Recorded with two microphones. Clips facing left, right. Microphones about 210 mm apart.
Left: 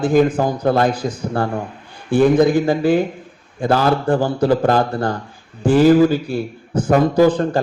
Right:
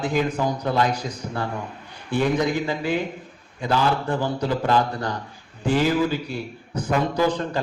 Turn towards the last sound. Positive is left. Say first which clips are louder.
# left 8 dB
turn(degrees=50)  # may be behind; listen again after turning